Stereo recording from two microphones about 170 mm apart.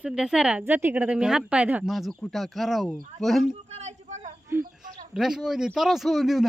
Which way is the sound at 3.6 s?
40° right (ahead or behind).